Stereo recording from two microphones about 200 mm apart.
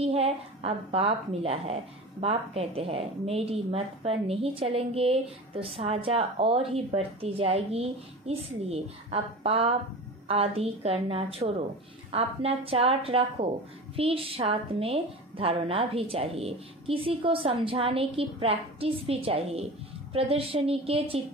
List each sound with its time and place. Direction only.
0.0 s a woman's voice: 30° right (ahead or behind)